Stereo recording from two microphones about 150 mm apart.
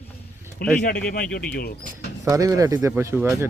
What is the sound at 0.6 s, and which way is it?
Speech, 80° left.